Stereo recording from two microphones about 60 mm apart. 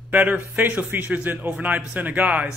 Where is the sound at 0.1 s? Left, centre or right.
Right.